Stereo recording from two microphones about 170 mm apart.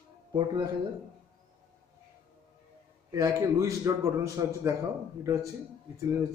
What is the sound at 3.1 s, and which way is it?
A man's voice, 20° right (ahead or behind).